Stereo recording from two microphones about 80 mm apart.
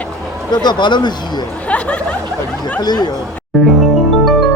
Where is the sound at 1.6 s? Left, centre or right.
Centre.